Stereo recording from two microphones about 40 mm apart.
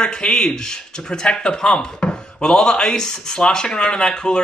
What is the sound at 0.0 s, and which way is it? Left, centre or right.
Speech, left.